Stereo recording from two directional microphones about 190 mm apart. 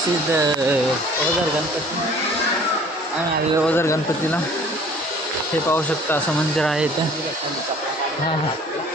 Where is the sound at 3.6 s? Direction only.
15° left (ahead or behind).